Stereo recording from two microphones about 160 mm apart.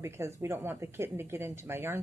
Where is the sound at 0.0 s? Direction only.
15° right (ahead or behind).